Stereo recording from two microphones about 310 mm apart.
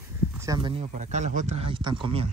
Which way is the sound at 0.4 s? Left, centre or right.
Centre.